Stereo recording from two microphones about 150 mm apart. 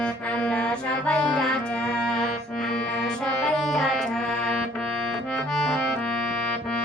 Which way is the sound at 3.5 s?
Centre (ahead or behind).